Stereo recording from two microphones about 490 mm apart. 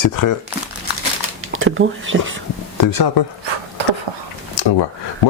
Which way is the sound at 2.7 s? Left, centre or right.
Left.